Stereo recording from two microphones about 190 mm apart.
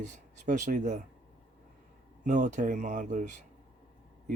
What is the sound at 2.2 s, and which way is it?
Speech, 40° right (ahead or behind).